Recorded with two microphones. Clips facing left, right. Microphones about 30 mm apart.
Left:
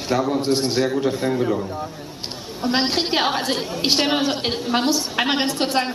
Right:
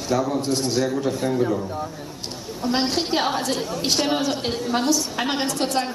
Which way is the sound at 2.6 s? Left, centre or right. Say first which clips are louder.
Left 2 dB; left.